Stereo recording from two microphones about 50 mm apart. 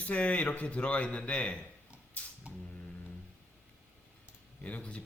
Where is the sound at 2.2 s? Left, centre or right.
Left.